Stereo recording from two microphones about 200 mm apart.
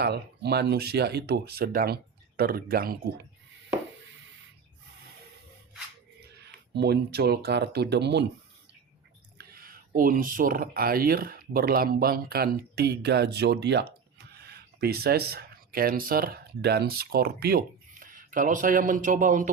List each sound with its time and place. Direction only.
0.0 s speech: 55° right (ahead or behind)
6.1 s speech: 55° right (ahead or behind)
9.4 s speech: 50° right (ahead or behind)